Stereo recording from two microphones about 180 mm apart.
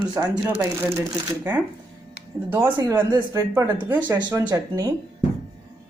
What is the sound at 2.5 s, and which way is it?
Speech, 20° right (ahead or behind).